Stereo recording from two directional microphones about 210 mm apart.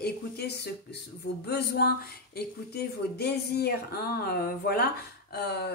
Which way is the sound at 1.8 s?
45° left (ahead or behind).